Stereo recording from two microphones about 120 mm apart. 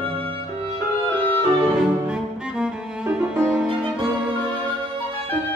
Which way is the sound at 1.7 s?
5° right (ahead or behind).